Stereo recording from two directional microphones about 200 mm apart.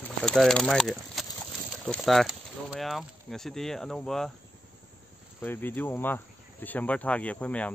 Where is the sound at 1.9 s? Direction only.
Centre (ahead or behind).